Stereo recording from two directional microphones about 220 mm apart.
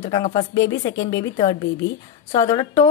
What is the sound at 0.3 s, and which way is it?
A woman's voice, 20° left (ahead or behind).